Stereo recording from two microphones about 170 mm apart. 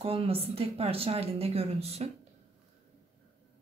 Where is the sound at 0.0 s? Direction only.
35° right (ahead or behind).